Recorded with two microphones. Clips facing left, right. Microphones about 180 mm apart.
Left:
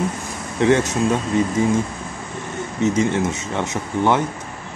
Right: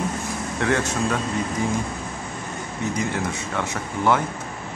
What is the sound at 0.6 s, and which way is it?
Speech, 20° left (ahead or behind).